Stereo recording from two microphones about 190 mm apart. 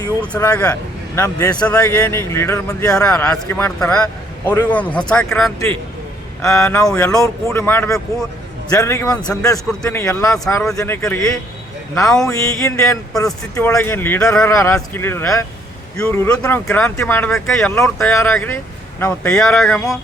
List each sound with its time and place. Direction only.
0.2 s speech: 10° left (ahead or behind)
6.4 s speech: 15° left (ahead or behind)
6.8 s speech: 5° left (ahead or behind)